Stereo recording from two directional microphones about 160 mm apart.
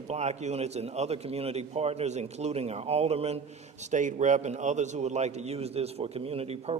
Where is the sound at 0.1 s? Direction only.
45° right (ahead or behind).